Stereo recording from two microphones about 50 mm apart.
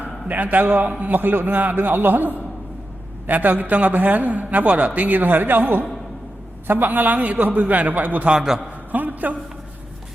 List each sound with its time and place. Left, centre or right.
0.0 s a man's voice: right
8.3 s a man's voice: centre
8.9 s a sound: right